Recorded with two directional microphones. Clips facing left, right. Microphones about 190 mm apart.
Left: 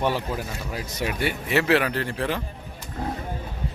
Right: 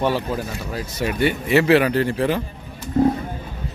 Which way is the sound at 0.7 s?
15° left (ahead or behind).